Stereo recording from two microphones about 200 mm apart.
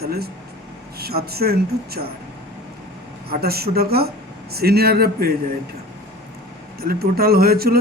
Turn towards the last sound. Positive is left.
turn(degrees=-50)  # may be behind; listen again after turning